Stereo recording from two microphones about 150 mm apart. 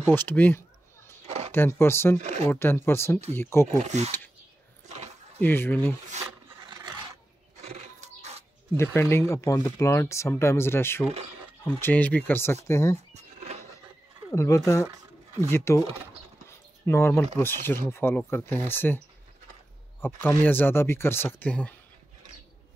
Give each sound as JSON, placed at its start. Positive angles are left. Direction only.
{"t": 0.0, "sound": "speech", "side_deg": 15}
{"t": 1.2, "sound": "a sound", "side_deg": -45}
{"t": 1.5, "sound": "speech", "side_deg": 15}
{"t": 2.2, "sound": "speech", "side_deg": -45}
{"t": 2.5, "sound": "speech", "side_deg": 15}
{"t": 3.7, "sound": "speech", "side_deg": -50}
{"t": 4.8, "sound": "a sound", "side_deg": -50}
{"t": 5.4, "sound": "speech", "side_deg": 15}
{"t": 7.6, "sound": "a sound", "side_deg": -45}
{"t": 8.7, "sound": "speech", "side_deg": 15}
{"t": 13.1, "sound": "a sound", "side_deg": -45}
{"t": 14.3, "sound": "speech", "side_deg": 20}
{"t": 16.8, "sound": "speech", "side_deg": 15}
{"t": 20.0, "sound": "speech", "side_deg": 15}